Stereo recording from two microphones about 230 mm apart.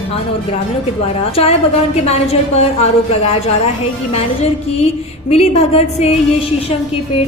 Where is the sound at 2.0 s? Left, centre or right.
Left.